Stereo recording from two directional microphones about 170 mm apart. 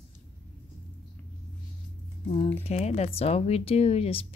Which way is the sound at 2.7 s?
40° left (ahead or behind).